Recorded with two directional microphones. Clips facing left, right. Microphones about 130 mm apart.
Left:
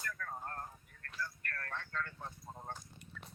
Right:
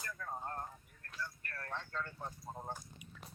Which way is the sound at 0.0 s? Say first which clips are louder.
Even; 20° right (ahead or behind).